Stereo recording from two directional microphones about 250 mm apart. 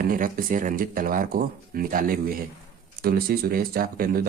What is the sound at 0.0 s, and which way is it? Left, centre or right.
Speech, right.